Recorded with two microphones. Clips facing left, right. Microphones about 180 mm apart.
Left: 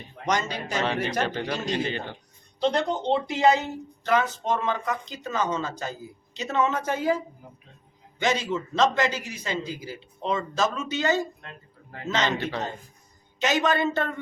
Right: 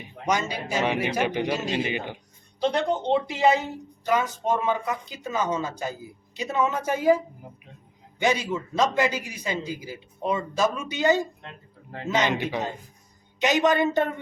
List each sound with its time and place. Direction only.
0.0 s speech: 10° right (ahead or behind)
8.2 s speech: 10° right (ahead or behind)